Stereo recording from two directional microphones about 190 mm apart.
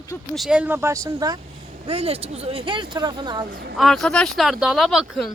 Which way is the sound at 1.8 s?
30° right (ahead or behind).